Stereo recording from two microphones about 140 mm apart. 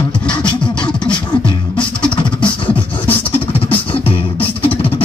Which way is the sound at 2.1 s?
40° left (ahead or behind).